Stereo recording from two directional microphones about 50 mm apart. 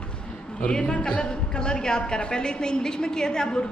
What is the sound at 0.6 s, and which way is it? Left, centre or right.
A woman's voice, left.